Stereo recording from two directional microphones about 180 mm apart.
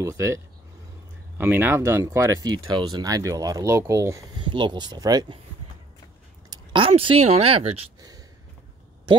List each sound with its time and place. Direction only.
0.0 s speech: 15° right (ahead or behind)
1.4 s speech: 10° right (ahead or behind)
4.4 s speech: 25° right (ahead or behind)
6.5 s speech: 30° right (ahead or behind)